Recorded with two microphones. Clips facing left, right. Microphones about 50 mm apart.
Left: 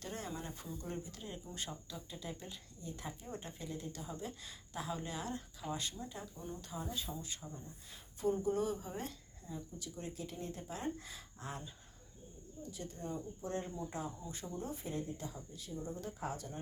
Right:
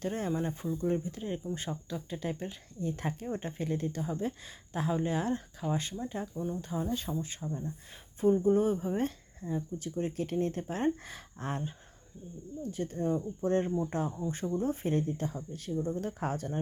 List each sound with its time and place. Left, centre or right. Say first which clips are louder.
0.0 s speech: right 11 dB; right
3.2 s speech: right 12 dB; right
6.3 s speech: right 11 dB; centre
6.6 s speech: right 9 dB; right
6.9 s speech: right 8 dB; right
7.4 s speech: right 12 dB; right
12.7 s speech: right 12 dB; right